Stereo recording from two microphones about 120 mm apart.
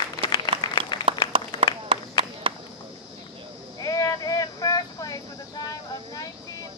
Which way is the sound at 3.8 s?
30° left (ahead or behind).